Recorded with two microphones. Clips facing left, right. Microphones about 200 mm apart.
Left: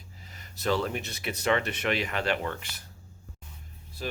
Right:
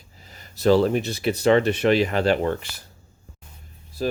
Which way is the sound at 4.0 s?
35° right (ahead or behind).